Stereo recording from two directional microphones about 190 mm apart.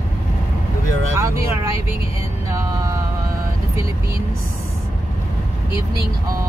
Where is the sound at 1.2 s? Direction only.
15° right (ahead or behind).